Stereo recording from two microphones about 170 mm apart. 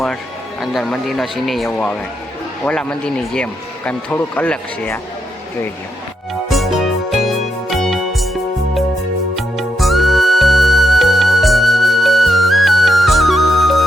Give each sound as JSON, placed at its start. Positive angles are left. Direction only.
{"t": 0.6, "sound": "a man's voice", "side_deg": 0}
{"t": 6.5, "sound": "music", "side_deg": 0}